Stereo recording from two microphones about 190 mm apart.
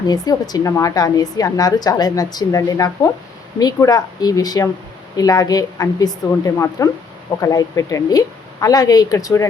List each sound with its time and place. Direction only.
0.1 s a woman's voice: 20° left (ahead or behind)